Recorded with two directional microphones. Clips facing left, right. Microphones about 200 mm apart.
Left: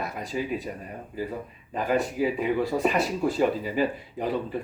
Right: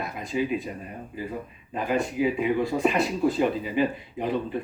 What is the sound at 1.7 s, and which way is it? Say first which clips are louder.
Speech: even; 5° left (ahead or behind).